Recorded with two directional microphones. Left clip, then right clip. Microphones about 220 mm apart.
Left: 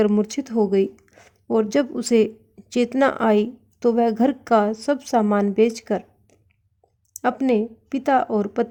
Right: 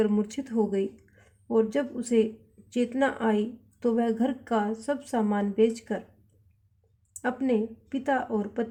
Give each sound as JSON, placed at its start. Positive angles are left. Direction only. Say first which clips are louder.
{"t": 0.0, "sound": "speech", "louder": "left 7 dB", "side_deg": 40}
{"t": 7.2, "sound": "speech", "louder": "left 7 dB", "side_deg": 45}